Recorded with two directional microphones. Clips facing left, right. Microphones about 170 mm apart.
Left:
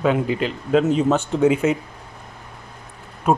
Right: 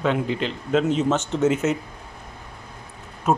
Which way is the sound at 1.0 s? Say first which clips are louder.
Left 3 dB; 35° left (ahead or behind).